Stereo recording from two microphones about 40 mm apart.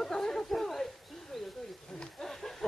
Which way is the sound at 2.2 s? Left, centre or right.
Centre.